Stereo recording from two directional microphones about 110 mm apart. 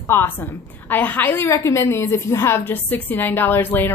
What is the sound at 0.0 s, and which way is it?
A woman's voice, 20° left (ahead or behind).